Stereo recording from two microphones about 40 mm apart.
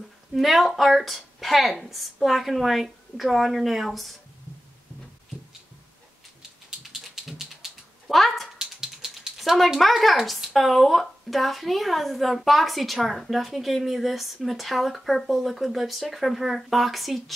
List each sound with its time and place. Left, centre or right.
0.3 s a woman's voice: centre
6.9 s music: centre
8.1 s a sound: centre
8.5 s dog: centre
9.4 s a woman's voice: centre